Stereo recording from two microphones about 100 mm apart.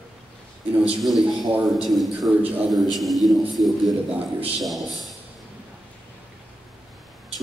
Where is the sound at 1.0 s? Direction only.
Centre (ahead or behind).